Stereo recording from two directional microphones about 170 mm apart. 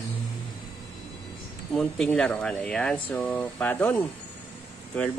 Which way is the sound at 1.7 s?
5° left (ahead or behind).